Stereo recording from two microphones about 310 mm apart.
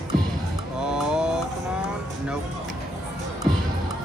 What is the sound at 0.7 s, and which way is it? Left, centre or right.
Music, centre.